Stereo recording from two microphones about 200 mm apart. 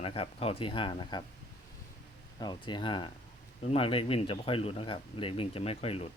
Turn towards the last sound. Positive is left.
turn(degrees=30)  # may be behind; listen again after turning